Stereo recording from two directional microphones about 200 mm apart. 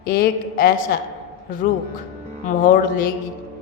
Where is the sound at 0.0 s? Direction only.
50° left (ahead or behind).